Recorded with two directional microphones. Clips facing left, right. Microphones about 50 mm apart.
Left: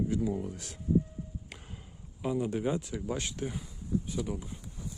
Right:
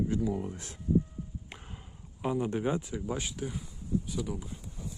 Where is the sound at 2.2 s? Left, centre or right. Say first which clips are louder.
Right 1 dB; right.